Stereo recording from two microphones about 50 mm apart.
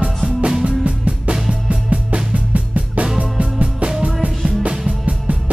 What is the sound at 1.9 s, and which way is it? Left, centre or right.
Music, right.